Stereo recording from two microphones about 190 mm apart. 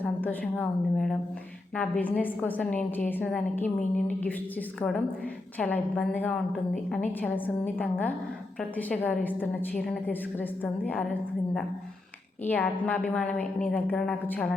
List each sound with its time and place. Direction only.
0.0 s a woman's voice: 10° left (ahead or behind)